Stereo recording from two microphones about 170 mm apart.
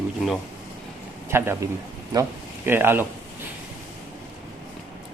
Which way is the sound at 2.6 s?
10° right (ahead or behind).